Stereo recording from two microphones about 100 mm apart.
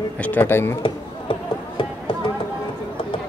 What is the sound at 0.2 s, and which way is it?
Speech, 20° left (ahead or behind).